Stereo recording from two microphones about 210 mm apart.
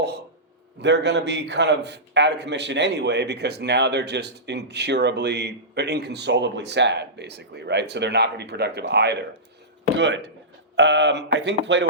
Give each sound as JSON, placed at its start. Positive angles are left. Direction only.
{"t": 0.8, "sound": "a man's voice", "side_deg": -55}